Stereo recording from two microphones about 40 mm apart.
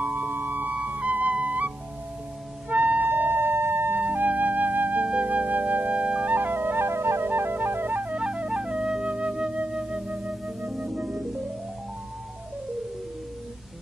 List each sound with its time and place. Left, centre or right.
0.0 s music: right
0.7 s music: right
2.7 s music: right
3.1 s siren: right
4.0 s music: right
6.3 s flute: right
8.2 s flute: right
9.7 s music: centre
10.4 s music: centre